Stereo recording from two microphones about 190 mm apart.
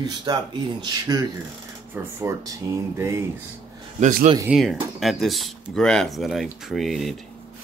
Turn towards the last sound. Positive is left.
turn(degrees=0)  # may be behind; listen again after turning